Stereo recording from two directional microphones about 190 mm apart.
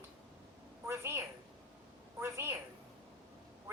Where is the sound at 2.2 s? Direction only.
15° right (ahead or behind).